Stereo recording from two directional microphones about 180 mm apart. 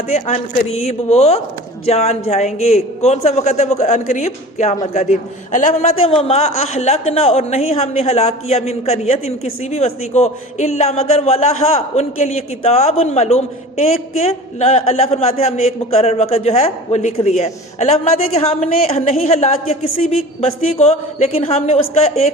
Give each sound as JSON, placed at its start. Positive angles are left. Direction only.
{"t": 0.1, "sound": "a man's voice", "side_deg": 40}